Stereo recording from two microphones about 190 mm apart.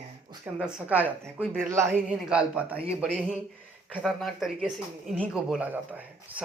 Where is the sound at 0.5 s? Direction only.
5° right (ahead or behind).